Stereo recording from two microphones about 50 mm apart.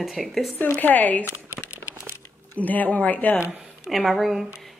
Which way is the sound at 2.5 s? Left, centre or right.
Left.